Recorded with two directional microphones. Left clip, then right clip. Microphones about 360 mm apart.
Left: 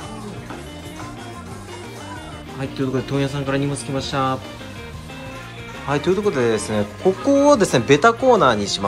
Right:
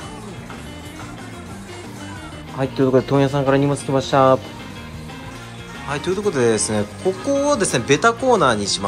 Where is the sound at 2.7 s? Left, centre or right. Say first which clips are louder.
Right 8 dB; right.